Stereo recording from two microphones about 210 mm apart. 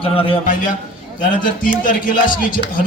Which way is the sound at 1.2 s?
40° left (ahead or behind).